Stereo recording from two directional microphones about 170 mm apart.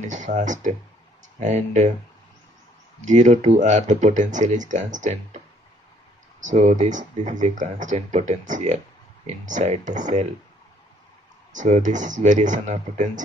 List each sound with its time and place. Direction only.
0.0 s speech: 45° right (ahead or behind)
3.1 s speech: 45° right (ahead or behind)
6.4 s speech: 45° right (ahead or behind)
11.5 s speech: 45° right (ahead or behind)